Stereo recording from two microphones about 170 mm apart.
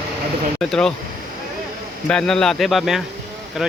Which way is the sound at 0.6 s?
5° left (ahead or behind).